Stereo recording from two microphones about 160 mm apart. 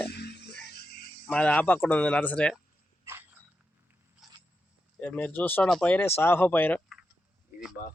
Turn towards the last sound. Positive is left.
turn(degrees=10)  # may be behind; listen again after turning